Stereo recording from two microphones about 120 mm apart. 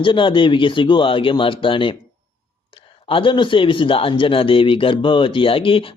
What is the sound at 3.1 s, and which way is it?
A man's voice, 45° left (ahead or behind).